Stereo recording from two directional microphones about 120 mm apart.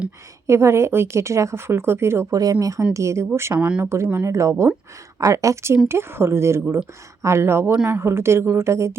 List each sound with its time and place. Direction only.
0.4 s speech: 20° right (ahead or behind)